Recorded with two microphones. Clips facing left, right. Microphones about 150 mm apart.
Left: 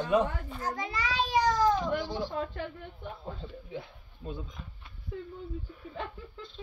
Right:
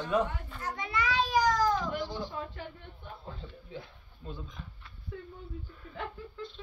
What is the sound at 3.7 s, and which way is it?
Speech, 15° left (ahead or behind).